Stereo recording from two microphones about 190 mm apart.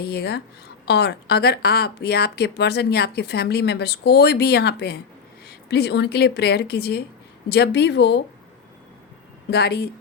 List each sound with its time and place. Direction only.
0.0 s speech: 60° left (ahead or behind)
9.5 s speech: 60° left (ahead or behind)